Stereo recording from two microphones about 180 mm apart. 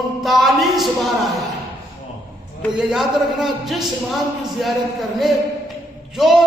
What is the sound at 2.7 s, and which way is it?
A man's voice, centre (ahead or behind).